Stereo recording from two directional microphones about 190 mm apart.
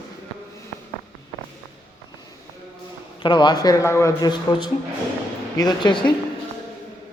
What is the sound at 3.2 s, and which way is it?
Speech, 25° left (ahead or behind).